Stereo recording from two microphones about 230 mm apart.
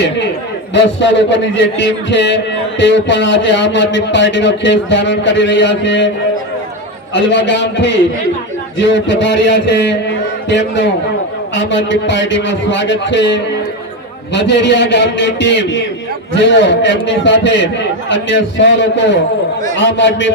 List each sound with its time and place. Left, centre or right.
0.7 s a man's voice: left
7.1 s a man's voice: left
11.5 s a man's voice: left